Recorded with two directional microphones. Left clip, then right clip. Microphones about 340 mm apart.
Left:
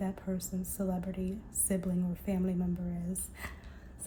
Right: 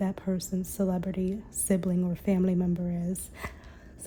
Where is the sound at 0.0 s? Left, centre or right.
Right.